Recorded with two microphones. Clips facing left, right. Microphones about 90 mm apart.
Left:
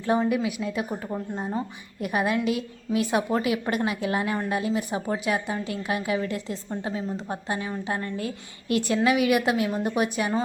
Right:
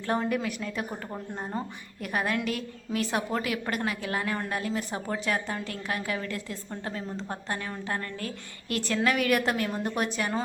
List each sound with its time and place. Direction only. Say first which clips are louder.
0.0 s a woman's voice: left 4 dB; 10° left (ahead or behind)
2.0 s a woman's voice: left 4 dB; 15° left (ahead or behind)